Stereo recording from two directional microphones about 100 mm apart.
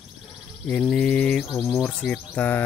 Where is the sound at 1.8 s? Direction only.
10° left (ahead or behind).